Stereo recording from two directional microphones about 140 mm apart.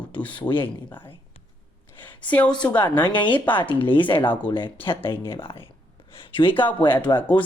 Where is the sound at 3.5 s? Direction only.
35° left (ahead or behind).